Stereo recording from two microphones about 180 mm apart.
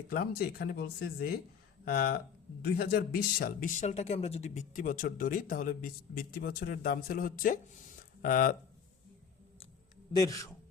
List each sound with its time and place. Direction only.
0.1 s speech: 60° left (ahead or behind)
10.1 s a man's voice: 20° left (ahead or behind)